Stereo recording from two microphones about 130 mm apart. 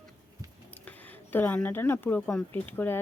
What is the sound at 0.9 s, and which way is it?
Speech, 15° left (ahead or behind).